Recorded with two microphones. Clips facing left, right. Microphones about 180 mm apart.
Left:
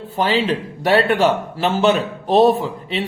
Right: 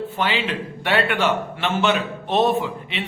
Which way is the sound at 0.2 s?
35° left (ahead or behind).